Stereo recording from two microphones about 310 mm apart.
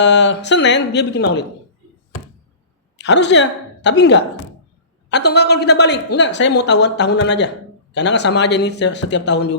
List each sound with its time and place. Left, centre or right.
0.0 s a woman's voice: left
3.0 s a woman's voice: left